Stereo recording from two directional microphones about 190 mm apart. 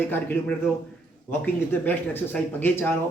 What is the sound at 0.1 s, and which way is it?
Speech, 10° left (ahead or behind).